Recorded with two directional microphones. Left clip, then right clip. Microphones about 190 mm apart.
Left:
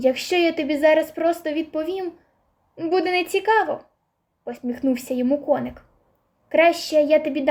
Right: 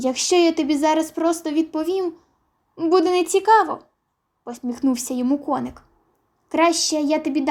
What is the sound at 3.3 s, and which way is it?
Speech, 90° right.